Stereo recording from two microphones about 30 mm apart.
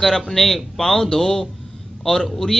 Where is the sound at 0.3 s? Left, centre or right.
Centre.